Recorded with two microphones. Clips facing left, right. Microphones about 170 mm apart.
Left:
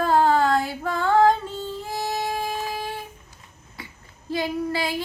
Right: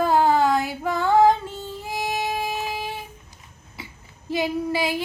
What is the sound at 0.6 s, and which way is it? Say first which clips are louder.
Female singing: right 2 dB; 20° right (ahead or behind).